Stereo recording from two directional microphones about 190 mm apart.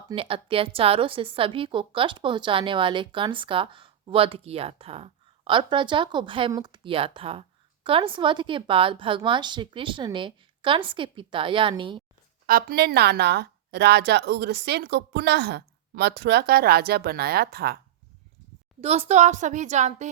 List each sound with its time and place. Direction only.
0.1 s a woman's voice: 30° right (ahead or behind)
12.5 s a woman's voice: 50° right (ahead or behind)
18.8 s a woman's voice: 35° right (ahead or behind)